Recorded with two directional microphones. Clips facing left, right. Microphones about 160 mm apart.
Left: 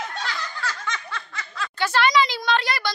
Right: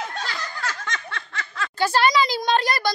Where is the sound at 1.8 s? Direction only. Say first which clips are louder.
Right 1 dB; 40° right (ahead or behind).